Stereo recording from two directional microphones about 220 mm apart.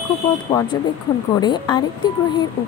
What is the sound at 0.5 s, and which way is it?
Speech, 15° left (ahead or behind).